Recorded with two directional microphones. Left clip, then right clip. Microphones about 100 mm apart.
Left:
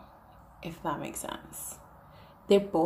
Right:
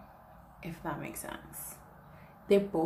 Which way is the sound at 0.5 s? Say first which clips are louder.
Left 5 dB; 20° left (ahead or behind).